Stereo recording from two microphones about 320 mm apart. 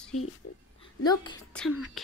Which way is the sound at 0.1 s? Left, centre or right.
Left.